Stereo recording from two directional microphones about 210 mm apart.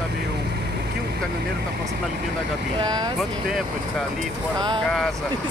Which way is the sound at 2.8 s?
20° right (ahead or behind).